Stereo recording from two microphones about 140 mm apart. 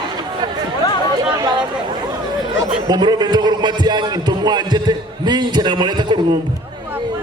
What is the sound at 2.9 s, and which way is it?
A man's voice, 30° right (ahead or behind).